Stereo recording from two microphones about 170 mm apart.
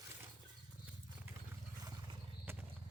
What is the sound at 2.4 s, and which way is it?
Horse, 10° right (ahead or behind).